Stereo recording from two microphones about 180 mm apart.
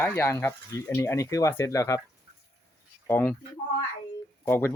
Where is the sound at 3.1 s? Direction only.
10° left (ahead or behind).